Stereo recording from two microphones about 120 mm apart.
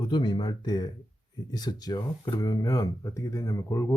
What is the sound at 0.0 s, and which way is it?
Speech, 40° left (ahead or behind).